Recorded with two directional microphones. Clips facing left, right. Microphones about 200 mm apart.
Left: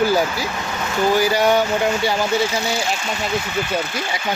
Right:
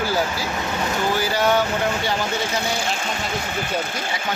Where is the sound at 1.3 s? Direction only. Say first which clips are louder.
Left 3 dB; 15° left (ahead or behind).